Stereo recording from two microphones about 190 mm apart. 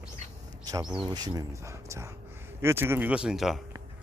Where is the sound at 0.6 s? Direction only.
20° right (ahead or behind); by 3.6 s centre (ahead or behind).